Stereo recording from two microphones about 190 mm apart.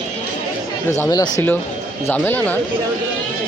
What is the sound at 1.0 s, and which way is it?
Speech, 15° left (ahead or behind).